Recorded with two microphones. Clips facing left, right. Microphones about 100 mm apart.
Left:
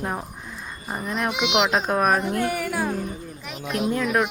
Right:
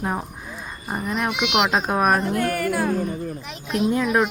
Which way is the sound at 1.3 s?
30° left (ahead or behind).